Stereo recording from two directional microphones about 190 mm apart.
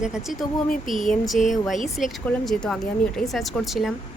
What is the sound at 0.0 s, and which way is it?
Speech, 5° right (ahead or behind).